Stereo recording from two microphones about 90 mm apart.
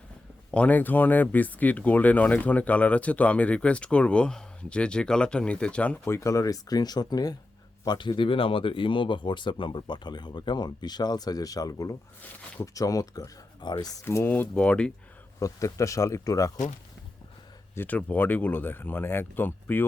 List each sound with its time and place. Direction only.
0.5 s speech: 15° left (ahead or behind)
6.1 s speech: 35° left (ahead or behind)
7.9 s speech: 60° left (ahead or behind); by 13.3 s 40° left (ahead or behind)
13.6 s speech: 50° left (ahead or behind)
14.0 s speech: 30° left (ahead or behind)
14.5 s speech: 15° left (ahead or behind)
15.4 s speech: 35° left (ahead or behind)
17.7 s speech: 20° left (ahead or behind)